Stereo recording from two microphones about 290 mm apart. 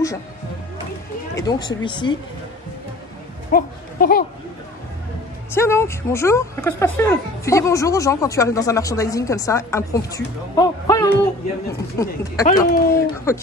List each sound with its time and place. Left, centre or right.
1.3 s speech: centre
3.5 s speech: left
5.5 s speech: centre
12.4 s speech: left
12.9 s speech: centre